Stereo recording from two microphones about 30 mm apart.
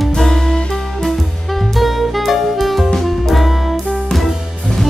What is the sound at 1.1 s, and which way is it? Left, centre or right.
Music, centre.